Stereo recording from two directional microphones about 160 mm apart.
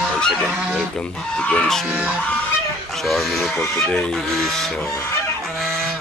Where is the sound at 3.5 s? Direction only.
15° left (ahead or behind).